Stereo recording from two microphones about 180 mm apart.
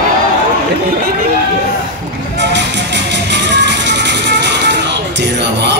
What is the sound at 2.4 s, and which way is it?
Music, 75° right (ahead or behind).